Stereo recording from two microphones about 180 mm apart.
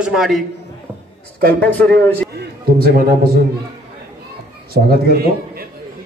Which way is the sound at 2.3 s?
60° right (ahead or behind).